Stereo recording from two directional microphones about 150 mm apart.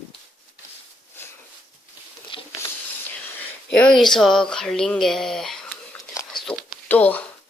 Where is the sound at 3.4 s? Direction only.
5° left (ahead or behind).